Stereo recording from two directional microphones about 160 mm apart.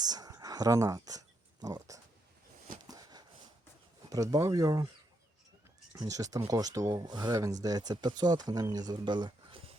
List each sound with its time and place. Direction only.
0.0 s speech: 25° right (ahead or behind)
2.8 s a sound: 25° right (ahead or behind)
4.1 s speech: 20° right (ahead or behind)
5.9 s speech: 20° right (ahead or behind)